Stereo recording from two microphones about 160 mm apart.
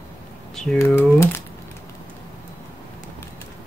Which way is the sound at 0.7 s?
15° left (ahead or behind).